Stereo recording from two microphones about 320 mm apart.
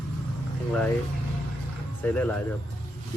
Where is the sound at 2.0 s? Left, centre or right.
Centre.